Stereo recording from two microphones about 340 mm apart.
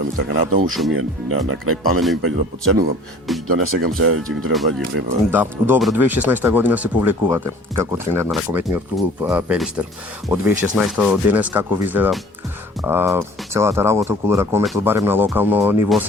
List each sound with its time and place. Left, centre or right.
0.9 s speech: right
3.3 s speech: centre
3.6 s speech: right
4.4 s speech: centre
4.9 s speech: right
5.3 s speech: centre